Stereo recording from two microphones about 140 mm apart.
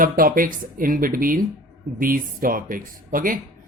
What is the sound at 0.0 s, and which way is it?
Speech, 90° right.